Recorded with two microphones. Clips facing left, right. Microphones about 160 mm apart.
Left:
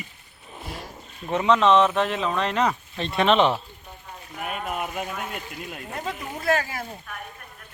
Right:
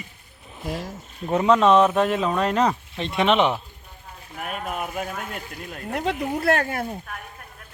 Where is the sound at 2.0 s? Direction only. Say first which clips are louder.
Right 3 dB; 45° right (ahead or behind).